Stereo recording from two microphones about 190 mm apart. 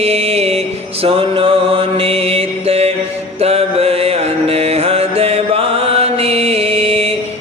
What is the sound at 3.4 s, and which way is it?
Music, 30° right (ahead or behind).